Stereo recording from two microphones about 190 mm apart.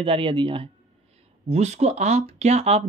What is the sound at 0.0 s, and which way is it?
Speech, 30° right (ahead or behind).